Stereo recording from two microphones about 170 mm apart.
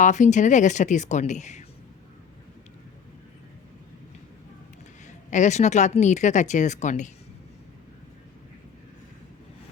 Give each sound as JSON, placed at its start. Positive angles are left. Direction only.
{"t": 0.0, "sound": "speech", "side_deg": 45}
{"t": 5.0, "sound": "speech", "side_deg": 45}